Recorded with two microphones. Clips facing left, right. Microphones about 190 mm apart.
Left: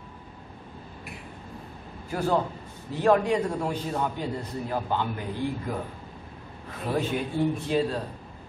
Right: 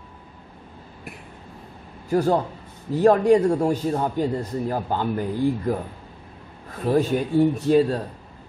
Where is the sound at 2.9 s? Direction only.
40° right (ahead or behind).